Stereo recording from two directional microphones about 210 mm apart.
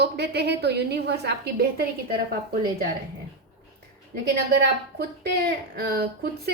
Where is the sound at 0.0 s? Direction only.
50° right (ahead or behind).